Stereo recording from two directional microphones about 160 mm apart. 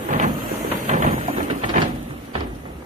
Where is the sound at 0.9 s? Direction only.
50° right (ahead or behind).